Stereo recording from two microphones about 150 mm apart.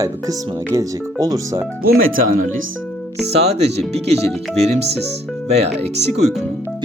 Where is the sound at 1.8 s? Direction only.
80° right.